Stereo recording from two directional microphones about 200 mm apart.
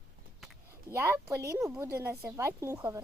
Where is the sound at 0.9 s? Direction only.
10° right (ahead or behind).